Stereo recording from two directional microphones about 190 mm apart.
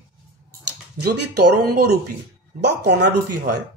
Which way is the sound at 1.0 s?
55° right (ahead or behind).